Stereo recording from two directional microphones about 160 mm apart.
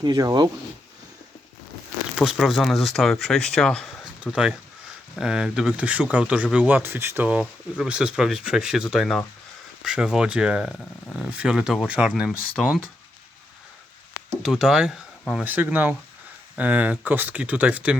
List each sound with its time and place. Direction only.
0.0 s speech: 25° right (ahead or behind)
2.1 s speech: 5° right (ahead or behind)
14.4 s speech: centre (ahead or behind)